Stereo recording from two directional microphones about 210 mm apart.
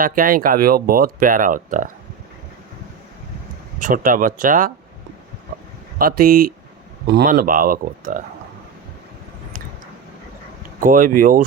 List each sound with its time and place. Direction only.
0.0 s speech: 40° right (ahead or behind)
3.8 s speech: 40° right (ahead or behind)
6.0 s speech: 45° right (ahead or behind)
10.8 s speech: 40° right (ahead or behind)